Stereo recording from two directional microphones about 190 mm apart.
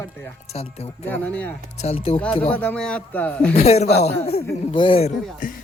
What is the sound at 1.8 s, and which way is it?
Speech, 30° left (ahead or behind).